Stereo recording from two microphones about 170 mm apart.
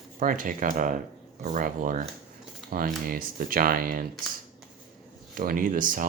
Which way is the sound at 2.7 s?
65° right (ahead or behind).